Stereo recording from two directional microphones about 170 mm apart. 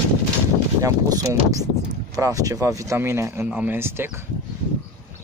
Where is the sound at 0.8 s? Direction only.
20° right (ahead or behind).